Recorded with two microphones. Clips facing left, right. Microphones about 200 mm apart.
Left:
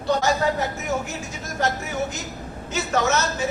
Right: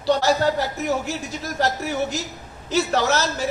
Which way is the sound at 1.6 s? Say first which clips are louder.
Right 2 dB; 35° right (ahead or behind).